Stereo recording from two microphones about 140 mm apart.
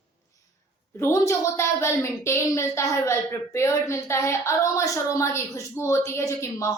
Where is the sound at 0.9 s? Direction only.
20° left (ahead or behind).